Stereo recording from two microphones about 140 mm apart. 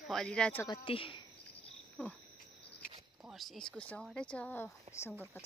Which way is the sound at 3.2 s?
Centre (ahead or behind).